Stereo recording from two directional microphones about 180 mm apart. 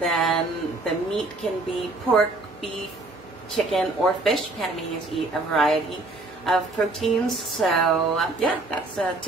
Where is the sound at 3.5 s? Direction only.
Centre (ahead or behind).